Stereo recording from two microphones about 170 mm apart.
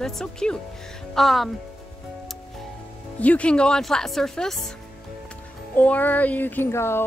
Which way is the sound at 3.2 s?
10° left (ahead or behind).